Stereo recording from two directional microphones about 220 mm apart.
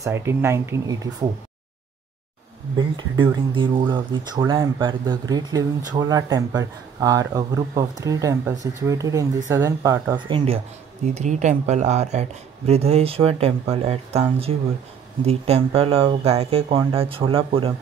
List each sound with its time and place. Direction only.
0.0 s speech: 10° right (ahead or behind)
2.8 s speech: 20° right (ahead or behind)
10.2 s speech: 25° right (ahead or behind)
15.2 s speech: 25° right (ahead or behind)